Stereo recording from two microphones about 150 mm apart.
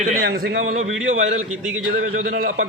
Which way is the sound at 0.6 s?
50° right (ahead or behind).